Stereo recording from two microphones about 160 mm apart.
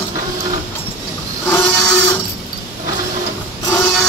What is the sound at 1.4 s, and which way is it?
Printer, 15° left (ahead or behind).